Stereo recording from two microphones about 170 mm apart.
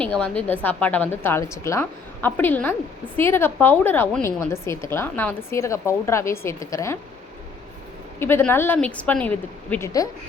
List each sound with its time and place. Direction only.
0.0 s a woman's voice: 5° left (ahead or behind)
8.2 s a woman's voice: 15° left (ahead or behind)